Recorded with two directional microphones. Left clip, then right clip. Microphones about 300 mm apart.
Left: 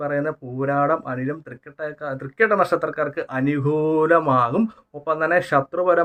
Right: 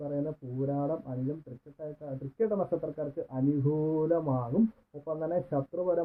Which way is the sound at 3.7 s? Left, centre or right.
Left.